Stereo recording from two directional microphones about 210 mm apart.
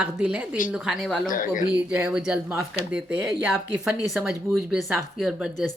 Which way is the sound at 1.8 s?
5° right (ahead or behind).